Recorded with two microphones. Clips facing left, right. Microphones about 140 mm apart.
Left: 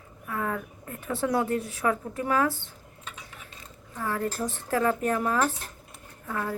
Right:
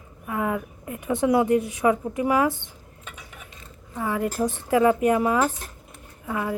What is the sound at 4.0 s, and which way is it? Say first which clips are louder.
A woman's voice: right 5 dB; 10° right (ahead or behind).